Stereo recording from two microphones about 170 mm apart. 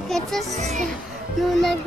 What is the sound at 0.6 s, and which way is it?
Speech, 45° right (ahead or behind).